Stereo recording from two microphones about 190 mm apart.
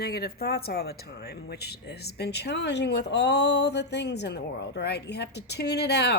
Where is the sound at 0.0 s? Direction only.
55° left (ahead or behind).